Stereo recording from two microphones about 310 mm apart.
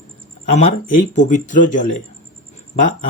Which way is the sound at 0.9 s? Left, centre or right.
Left.